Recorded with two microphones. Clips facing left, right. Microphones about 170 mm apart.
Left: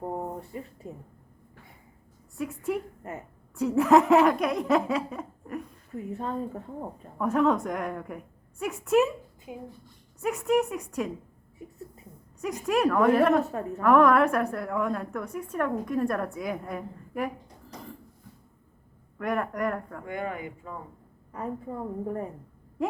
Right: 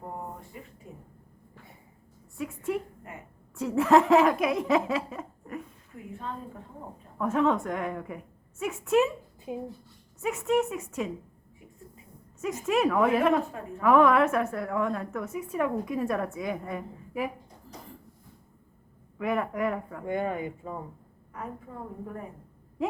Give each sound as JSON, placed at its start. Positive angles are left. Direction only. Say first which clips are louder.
{"t": 0.8, "sound": "a woman's voice", "louder": "left 6 dB", "side_deg": 35}
{"t": 2.4, "sound": "a woman's voice", "louder": "left 1 dB", "side_deg": 0}
{"t": 3.1, "sound": "a woman's voice", "louder": "left 6 dB", "side_deg": 40}
{"t": 3.5, "sound": "a woman's voice", "louder": "left 1 dB", "side_deg": 0}
{"t": 6.0, "sound": "a woman's voice", "louder": "left 5 dB", "side_deg": 40}
{"t": 7.2, "sound": "a woman's voice", "louder": "left 1 dB", "side_deg": 0}
{"t": 9.5, "sound": "speech", "louder": "right 5 dB", "side_deg": -25}
{"t": 10.2, "sound": "a woman's voice", "louder": "left 1 dB", "side_deg": 0}
{"t": 12.4, "sound": "a woman's voice", "louder": "even", "side_deg": 0}
{"t": 19.2, "sound": "a woman's voice", "louder": "even", "side_deg": -5}
{"t": 20.1, "sound": "speech", "louder": "right 4 dB", "side_deg": -25}
{"t": 22.8, "sound": "a sound", "louder": "left 1 dB", "side_deg": 0}